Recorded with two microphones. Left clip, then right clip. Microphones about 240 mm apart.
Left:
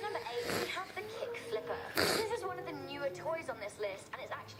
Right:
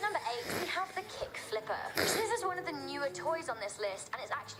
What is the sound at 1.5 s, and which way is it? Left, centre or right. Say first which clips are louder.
Throat clearing: right 4 dB; right.